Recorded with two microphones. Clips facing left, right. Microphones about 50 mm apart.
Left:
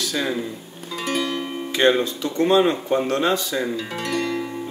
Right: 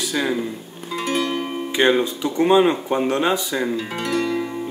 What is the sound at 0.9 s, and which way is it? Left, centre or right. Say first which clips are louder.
Music: right 2 dB; centre.